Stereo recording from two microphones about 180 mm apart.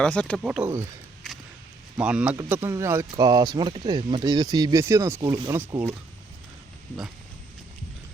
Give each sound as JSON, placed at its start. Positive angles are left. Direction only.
{"t": 0.0, "sound": "speech", "side_deg": 5}
{"t": 0.4, "sound": "speech", "side_deg": -5}
{"t": 2.0, "sound": "speech", "side_deg": -5}